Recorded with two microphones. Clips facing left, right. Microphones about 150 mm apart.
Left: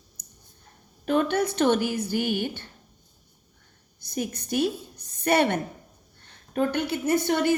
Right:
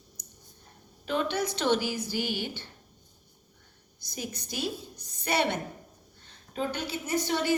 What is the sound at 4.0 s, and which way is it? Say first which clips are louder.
A woman's voice: left 7 dB; 55° left (ahead or behind).